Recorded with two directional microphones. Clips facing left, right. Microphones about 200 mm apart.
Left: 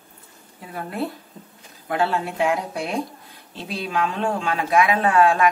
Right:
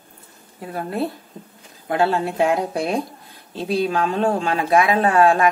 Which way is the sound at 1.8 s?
30° right (ahead or behind).